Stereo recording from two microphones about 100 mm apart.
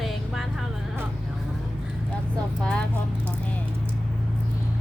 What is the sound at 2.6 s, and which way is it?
Speech, 10° left (ahead or behind).